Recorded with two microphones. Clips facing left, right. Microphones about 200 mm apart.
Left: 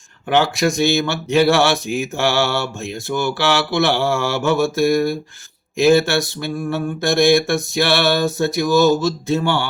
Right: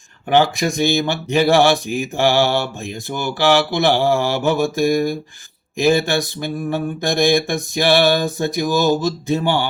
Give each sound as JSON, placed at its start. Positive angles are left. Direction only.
{"t": 0.3, "sound": "speech", "side_deg": -15}